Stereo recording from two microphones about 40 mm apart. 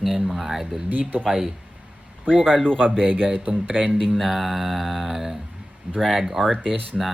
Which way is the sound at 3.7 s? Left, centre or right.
Right.